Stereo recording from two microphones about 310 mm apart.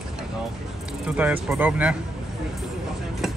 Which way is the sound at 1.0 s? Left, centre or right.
Centre.